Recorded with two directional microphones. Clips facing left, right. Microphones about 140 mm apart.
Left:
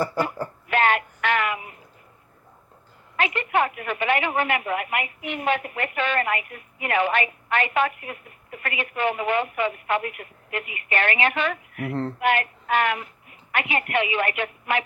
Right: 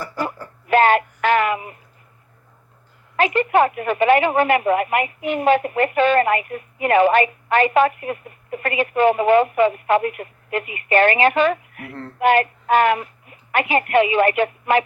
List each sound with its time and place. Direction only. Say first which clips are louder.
0.7 s a sound: right 7 dB; 40° right (ahead or behind)
3.2 s a woman's voice: right 7 dB; 40° right (ahead or behind)
11.9 s speech: left 7 dB; 30° left (ahead or behind)
12.2 s a woman's voice: right 9 dB; 40° right (ahead or behind)